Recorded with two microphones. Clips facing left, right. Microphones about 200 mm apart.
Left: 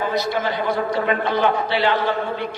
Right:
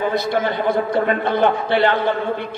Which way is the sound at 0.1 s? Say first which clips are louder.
Right 2 dB; 55° right (ahead or behind).